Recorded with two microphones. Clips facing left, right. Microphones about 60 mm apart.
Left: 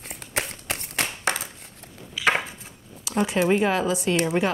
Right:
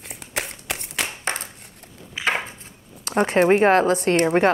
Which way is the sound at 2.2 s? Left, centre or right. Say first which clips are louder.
Left 2 dB; right.